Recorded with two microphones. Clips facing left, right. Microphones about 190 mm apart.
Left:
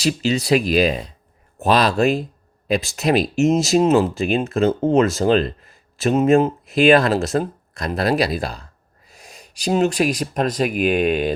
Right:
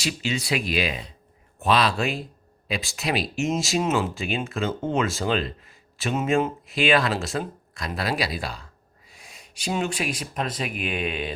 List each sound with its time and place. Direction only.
0.0 s speech: 40° left (ahead or behind)